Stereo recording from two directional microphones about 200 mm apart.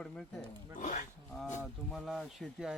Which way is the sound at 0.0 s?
Centre (ahead or behind).